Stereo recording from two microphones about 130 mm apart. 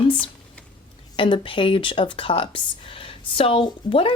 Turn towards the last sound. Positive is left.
turn(degrees=45)  # may be behind; listen again after turning